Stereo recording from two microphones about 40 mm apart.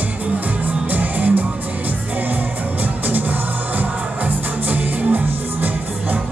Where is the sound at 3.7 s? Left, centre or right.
Right.